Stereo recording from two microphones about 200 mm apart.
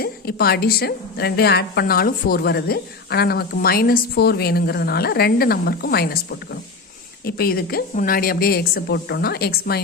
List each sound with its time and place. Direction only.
0.0 s a woman's voice: 50° left (ahead or behind)
7.3 s a woman's voice: 50° left (ahead or behind)